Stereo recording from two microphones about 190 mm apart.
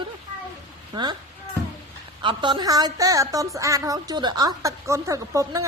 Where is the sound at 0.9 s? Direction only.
20° right (ahead or behind).